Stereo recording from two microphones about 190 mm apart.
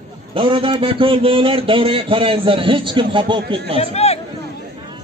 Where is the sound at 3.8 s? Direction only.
35° left (ahead or behind).